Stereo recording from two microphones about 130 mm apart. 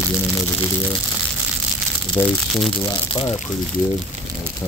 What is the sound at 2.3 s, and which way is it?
Speech, centre (ahead or behind).